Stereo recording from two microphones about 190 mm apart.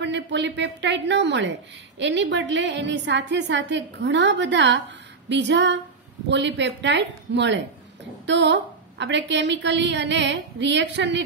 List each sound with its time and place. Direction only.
0.0 s a woman's voice: 70° right (ahead or behind)